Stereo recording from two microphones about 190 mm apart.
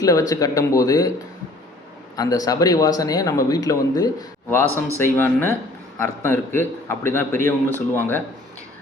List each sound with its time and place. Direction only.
0.0 s a man's voice: 20° left (ahead or behind)
2.1 s a man's voice: 20° left (ahead or behind)